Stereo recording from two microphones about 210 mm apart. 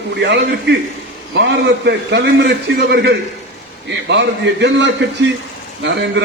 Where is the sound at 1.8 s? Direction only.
55° right (ahead or behind).